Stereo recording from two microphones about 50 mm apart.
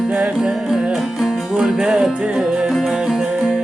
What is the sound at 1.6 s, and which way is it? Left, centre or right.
Music, centre.